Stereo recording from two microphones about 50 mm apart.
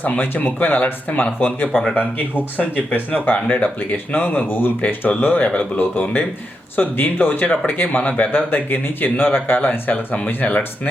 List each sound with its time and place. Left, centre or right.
0.0 s speech: left
1.7 s speech: centre
3.1 s speech: left